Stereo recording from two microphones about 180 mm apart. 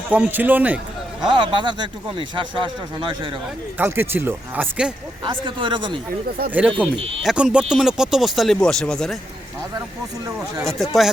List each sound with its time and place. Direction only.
0.1 s speech: 10° right (ahead or behind)
1.3 s speech: 25° right (ahead or behind)
3.8 s speech: 10° right (ahead or behind)
5.2 s speech: 25° right (ahead or behind)
6.5 s speech: 10° right (ahead or behind)
10.6 s speech: centre (ahead or behind)